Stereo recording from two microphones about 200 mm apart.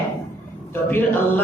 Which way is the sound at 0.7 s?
10° left (ahead or behind).